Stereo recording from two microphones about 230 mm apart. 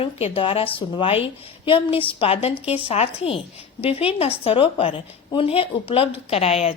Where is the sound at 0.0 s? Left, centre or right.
Left.